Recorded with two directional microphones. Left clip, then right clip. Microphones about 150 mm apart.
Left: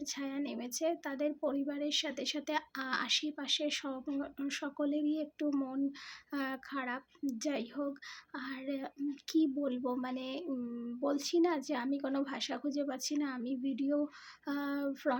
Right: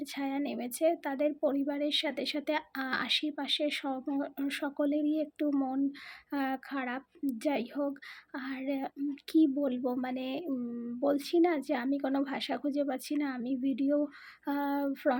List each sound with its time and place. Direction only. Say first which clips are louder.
0.0 s a woman's voice: right 4 dB; 25° right (ahead or behind)